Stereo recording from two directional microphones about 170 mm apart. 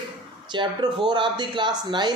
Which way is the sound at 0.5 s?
25° right (ahead or behind).